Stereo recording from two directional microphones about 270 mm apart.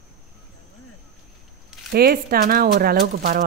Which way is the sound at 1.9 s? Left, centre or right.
Right.